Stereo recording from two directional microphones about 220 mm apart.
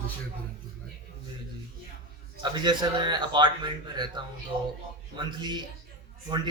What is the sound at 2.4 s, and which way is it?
A man's voice, 20° right (ahead or behind).